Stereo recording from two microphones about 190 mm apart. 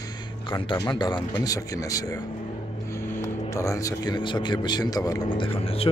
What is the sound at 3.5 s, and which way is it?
A man's voice, 15° left (ahead or behind).